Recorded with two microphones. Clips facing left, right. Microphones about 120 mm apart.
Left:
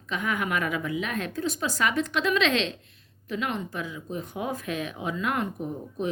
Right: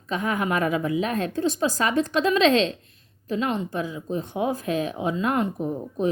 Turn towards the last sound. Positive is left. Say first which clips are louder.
# right 5 dB
turn(degrees=-35)  # may be behind; listen again after turning